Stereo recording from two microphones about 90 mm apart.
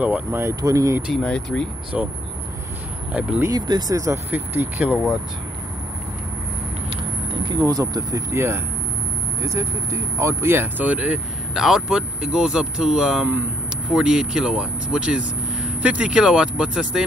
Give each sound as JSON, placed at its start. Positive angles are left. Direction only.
{"t": 0.0, "sound": "speech", "side_deg": -20}
{"t": 0.6, "sound": "speech", "side_deg": -40}
{"t": 1.2, "sound": "speech", "side_deg": 10}
{"t": 1.9, "sound": "speech", "side_deg": -10}
{"t": 3.5, "sound": "speech", "side_deg": -50}
{"t": 4.3, "sound": "speech", "side_deg": -20}
{"t": 7.4, "sound": "speech", "side_deg": -50}